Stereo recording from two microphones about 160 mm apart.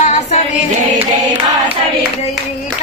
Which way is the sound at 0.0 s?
45° left (ahead or behind).